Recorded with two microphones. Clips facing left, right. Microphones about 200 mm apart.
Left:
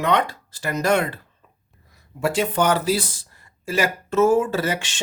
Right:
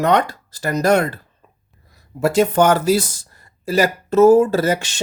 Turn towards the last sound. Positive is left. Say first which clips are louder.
# right 6 dB
turn(degrees=-40)  # may be behind; listen again after turning